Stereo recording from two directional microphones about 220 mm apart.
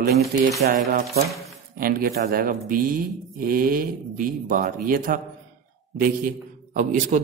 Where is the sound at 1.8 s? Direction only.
45° right (ahead or behind).